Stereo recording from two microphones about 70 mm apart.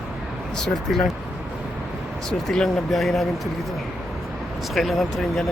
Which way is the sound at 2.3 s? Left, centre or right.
Centre.